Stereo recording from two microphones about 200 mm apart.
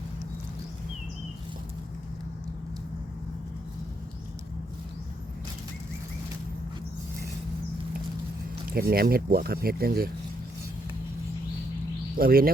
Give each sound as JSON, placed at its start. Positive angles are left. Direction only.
{"t": 8.6, "sound": "speech", "side_deg": -50}
{"t": 12.1, "sound": "speech", "side_deg": -45}